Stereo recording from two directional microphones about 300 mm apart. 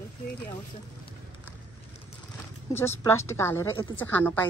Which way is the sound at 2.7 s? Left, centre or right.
Centre.